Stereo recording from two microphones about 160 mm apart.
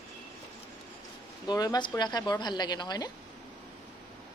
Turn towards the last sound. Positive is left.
turn(degrees=25)  # may be behind; listen again after turning